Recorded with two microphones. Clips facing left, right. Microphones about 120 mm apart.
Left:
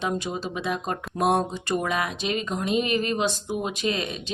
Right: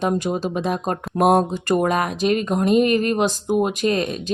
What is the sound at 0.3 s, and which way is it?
A woman's voice, 45° right (ahead or behind).